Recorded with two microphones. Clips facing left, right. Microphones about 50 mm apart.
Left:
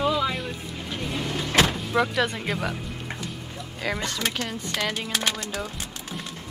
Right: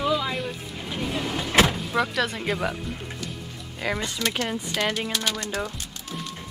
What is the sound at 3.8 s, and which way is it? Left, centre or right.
Speech, centre.